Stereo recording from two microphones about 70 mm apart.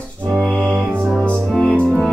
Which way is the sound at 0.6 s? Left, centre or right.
Right.